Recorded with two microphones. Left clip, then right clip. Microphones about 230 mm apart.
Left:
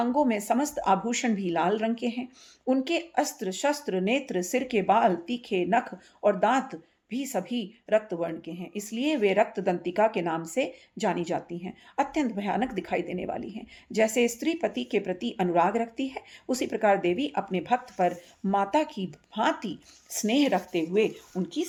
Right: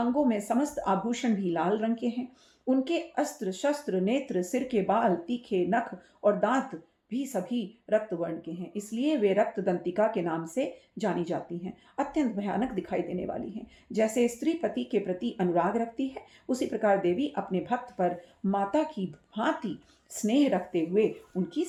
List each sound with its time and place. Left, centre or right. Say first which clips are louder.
0.0 s a woman's voice: left 2 dB; left